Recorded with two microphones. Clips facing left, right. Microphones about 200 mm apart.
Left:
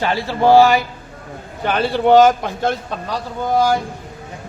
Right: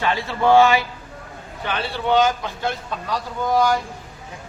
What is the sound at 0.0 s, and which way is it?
Speech, 35° left (ahead or behind).